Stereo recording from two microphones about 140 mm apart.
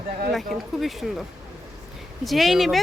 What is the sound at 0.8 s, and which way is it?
Speech, centre (ahead or behind).